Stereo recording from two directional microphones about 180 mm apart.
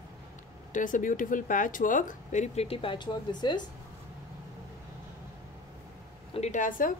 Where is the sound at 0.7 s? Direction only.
45° left (ahead or behind); by 3.6 s 25° left (ahead or behind).